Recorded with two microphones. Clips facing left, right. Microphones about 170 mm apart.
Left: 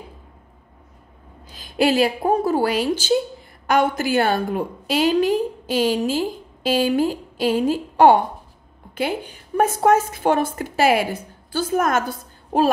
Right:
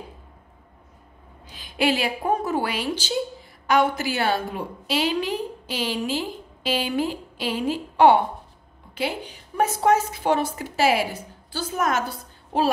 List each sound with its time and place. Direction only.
1.5 s a woman's voice: 40° left (ahead or behind)